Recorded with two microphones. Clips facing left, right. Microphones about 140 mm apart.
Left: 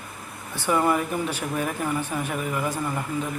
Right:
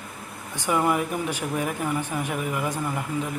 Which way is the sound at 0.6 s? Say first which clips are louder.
Left 1 dB; 10° right (ahead or behind).